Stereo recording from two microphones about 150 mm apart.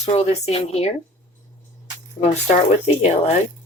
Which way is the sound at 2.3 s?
50° left (ahead or behind).